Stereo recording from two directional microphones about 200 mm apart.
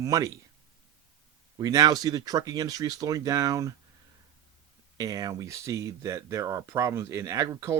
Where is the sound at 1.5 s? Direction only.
20° right (ahead or behind).